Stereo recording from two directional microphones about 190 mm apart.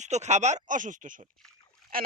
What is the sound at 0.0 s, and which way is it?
Speech, 35° right (ahead or behind).